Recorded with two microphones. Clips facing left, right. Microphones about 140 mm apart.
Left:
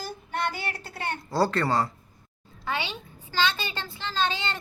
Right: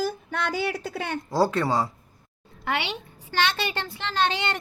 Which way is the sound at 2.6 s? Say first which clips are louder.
Right 3 dB; 70° right (ahead or behind).